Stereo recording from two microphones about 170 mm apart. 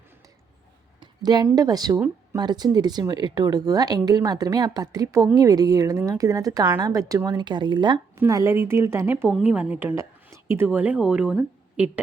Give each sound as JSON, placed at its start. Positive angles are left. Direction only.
{"t": 0.9, "sound": "a woman's voice", "side_deg": -25}